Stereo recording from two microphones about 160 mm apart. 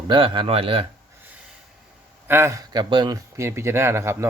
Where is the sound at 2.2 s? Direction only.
15° right (ahead or behind).